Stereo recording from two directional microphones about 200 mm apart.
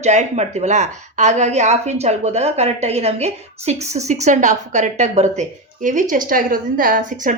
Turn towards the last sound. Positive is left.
turn(degrees=-40)  # may be behind; listen again after turning